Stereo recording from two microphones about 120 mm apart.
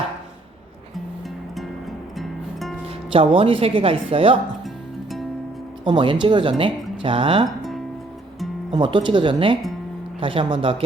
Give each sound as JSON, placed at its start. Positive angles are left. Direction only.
{"t": 2.1, "sound": "music", "side_deg": 0}
{"t": 2.8, "sound": "speech", "side_deg": -50}
{"t": 5.8, "sound": "speech", "side_deg": -45}
{"t": 8.7, "sound": "speech", "side_deg": -40}